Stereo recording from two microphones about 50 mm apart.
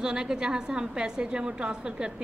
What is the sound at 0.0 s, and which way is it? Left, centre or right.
A woman's voice, centre.